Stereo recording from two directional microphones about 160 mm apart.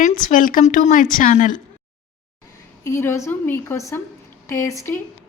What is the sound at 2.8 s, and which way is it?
A woman's voice, 15° left (ahead or behind).